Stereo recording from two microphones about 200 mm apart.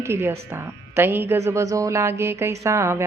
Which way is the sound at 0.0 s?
10° right (ahead or behind).